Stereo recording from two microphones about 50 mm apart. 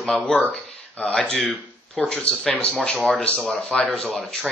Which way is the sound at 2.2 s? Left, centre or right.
Left.